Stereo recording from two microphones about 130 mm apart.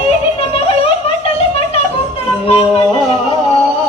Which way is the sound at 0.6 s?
50° left (ahead or behind).